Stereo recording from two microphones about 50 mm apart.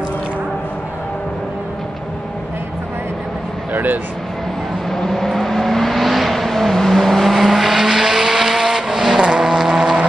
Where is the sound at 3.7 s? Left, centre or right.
Right.